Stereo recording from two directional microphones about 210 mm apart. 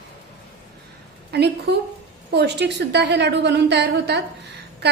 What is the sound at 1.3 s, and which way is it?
A woman's voice, 50° right (ahead or behind).